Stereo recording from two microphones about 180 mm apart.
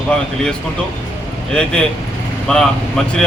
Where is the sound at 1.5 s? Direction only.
5° left (ahead or behind).